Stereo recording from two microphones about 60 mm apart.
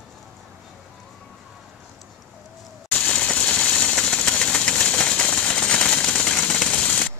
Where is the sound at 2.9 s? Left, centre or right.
Centre.